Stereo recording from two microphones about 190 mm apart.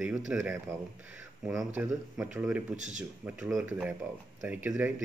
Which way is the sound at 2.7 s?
40° right (ahead or behind).